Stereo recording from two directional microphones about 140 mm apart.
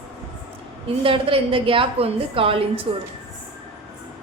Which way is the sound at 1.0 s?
40° right (ahead or behind).